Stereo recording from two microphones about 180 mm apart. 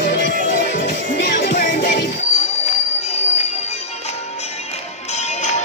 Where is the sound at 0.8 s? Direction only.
70° left (ahead or behind).